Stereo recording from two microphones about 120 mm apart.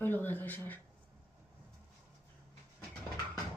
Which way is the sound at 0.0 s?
15° left (ahead or behind).